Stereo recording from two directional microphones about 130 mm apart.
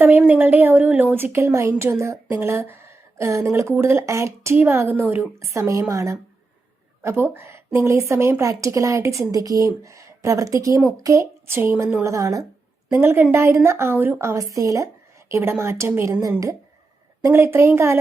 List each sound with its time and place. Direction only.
0.0 s a woman's voice: 15° right (ahead or behind)